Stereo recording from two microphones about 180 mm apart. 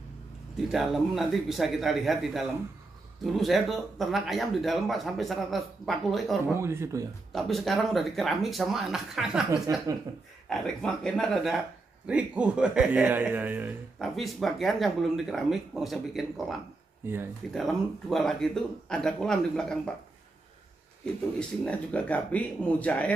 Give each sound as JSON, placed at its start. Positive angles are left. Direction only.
{"t": 0.7, "sound": "speech", "side_deg": 0}
{"t": 6.5, "sound": "a man's voice", "side_deg": -15}
{"t": 7.3, "sound": "speech", "side_deg": 0}
{"t": 9.7, "sound": "a man's voice", "side_deg": -20}
{"t": 10.5, "sound": "a man's voice", "side_deg": 5}
{"t": 13.9, "sound": "speech", "side_deg": 0}
{"t": 21.4, "sound": "speech", "side_deg": 5}